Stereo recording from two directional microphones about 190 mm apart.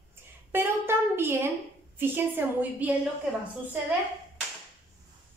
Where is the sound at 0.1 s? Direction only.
10° right (ahead or behind).